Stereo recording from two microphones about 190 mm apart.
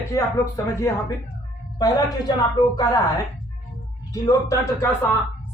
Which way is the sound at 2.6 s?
20° left (ahead or behind).